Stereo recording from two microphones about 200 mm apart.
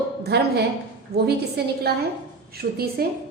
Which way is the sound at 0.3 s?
55° right (ahead or behind).